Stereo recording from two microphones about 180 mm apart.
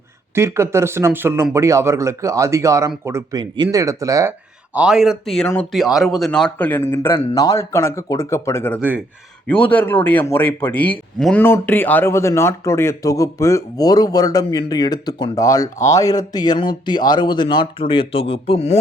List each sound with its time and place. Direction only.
0.3 s a man's voice: 15° right (ahead or behind); by 18.8 s 35° left (ahead or behind)